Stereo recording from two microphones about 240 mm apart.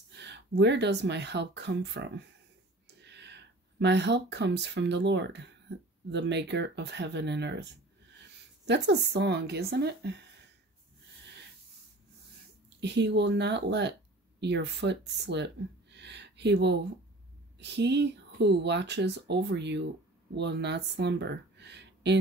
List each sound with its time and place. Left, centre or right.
0.1 s speech: right
8.6 s speech: right
12.6 s speech: right